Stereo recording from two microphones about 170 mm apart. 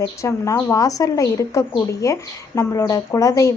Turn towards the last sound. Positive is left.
turn(degrees=20)  # may be behind; listen again after turning